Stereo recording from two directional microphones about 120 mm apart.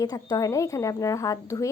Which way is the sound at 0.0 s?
30° left (ahead or behind).